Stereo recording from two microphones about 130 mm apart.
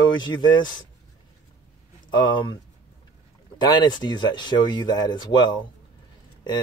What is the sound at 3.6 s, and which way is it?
Speech, 35° left (ahead or behind).